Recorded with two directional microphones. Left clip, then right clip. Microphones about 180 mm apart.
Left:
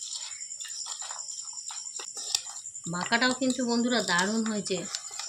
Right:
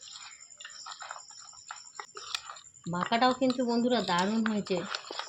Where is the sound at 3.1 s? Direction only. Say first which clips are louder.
Even; 25° right (ahead or behind).